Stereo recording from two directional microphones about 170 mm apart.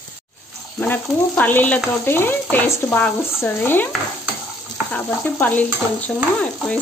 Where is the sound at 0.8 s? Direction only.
10° left (ahead or behind).